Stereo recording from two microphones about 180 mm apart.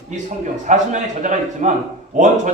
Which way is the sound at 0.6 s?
45° right (ahead or behind).